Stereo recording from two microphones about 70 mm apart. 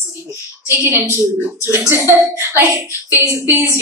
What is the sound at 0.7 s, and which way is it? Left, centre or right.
Speech, right.